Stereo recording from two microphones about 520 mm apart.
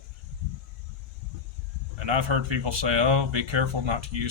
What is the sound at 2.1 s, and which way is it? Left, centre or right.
Speech, right.